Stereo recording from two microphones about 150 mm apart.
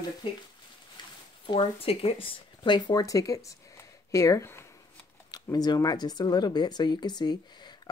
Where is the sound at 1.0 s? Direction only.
30° left (ahead or behind).